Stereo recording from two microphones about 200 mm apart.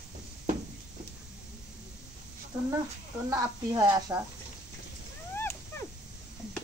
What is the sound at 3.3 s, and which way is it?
Speech, 20° right (ahead or behind).